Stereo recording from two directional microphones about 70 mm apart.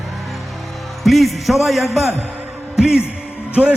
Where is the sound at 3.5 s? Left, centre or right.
Centre.